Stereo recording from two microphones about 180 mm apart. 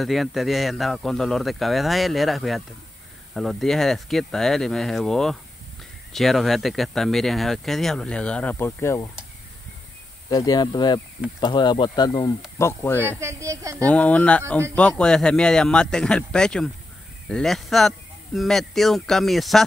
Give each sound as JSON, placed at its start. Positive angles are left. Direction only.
{"t": 0.0, "sound": "speech", "side_deg": 0}
{"t": 10.3, "sound": "speech", "side_deg": 20}
{"t": 13.2, "sound": "a woman's voice", "side_deg": -15}
{"t": 13.8, "sound": "speech", "side_deg": 5}